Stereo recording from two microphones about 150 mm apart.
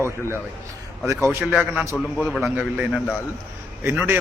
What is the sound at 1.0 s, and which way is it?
A man's voice, 20° right (ahead or behind).